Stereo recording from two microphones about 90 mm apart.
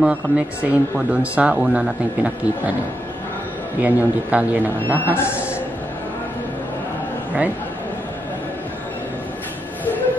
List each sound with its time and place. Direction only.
0.0 s speech: 15° right (ahead or behind)
3.8 s speech: 15° right (ahead or behind)
4.9 s a man's voice: 25° left (ahead or behind)